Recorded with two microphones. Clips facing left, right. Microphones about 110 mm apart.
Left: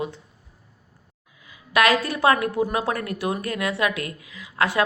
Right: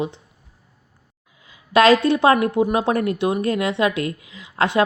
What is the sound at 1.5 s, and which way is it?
A woman's voice, 30° right (ahead or behind).